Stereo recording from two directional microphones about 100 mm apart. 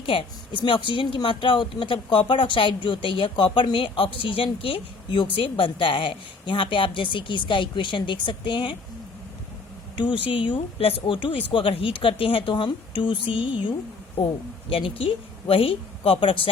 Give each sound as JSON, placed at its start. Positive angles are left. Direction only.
{"t": 0.0, "sound": "speech", "side_deg": 60}
{"t": 10.0, "sound": "speech", "side_deg": 60}